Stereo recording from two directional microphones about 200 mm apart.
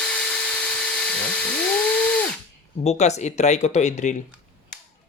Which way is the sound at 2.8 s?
35° left (ahead or behind).